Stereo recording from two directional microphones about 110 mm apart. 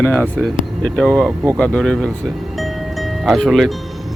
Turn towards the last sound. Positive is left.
turn(degrees=0)  # may be behind; listen again after turning